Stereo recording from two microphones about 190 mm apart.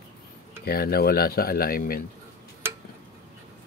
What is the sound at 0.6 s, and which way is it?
Speech, 55° left (ahead or behind).